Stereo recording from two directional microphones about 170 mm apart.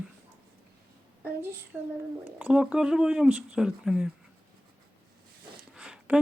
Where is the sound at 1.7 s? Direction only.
15° right (ahead or behind).